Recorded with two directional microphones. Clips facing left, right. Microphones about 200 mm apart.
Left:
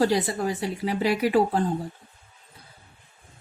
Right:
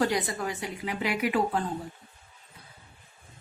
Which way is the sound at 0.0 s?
30° left (ahead or behind).